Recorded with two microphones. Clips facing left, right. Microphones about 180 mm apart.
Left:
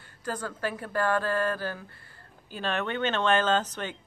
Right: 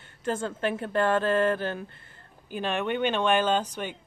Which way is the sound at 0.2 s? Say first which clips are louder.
Right 4 dB; 25° right (ahead or behind).